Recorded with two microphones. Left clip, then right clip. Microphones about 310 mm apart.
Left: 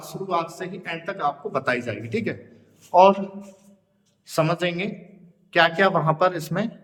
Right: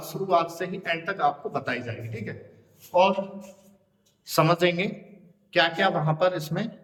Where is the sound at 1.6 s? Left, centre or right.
Centre.